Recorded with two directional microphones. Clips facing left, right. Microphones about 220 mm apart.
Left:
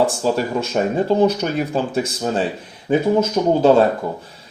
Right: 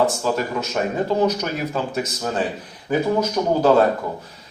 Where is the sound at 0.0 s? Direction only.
30° left (ahead or behind).